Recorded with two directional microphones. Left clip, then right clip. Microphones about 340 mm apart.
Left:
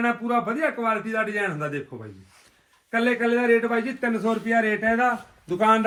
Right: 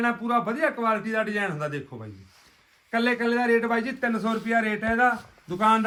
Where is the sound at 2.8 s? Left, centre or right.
Right.